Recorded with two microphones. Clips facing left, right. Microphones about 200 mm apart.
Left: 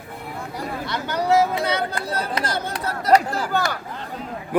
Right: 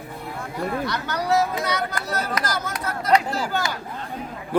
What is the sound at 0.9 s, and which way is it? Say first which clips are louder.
Speech: left 7 dB; 25° left (ahead or behind).